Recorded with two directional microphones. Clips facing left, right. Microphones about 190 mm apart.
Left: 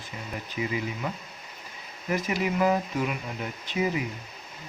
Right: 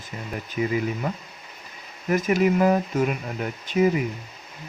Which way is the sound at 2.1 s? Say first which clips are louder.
Right 7 dB; 45° right (ahead or behind).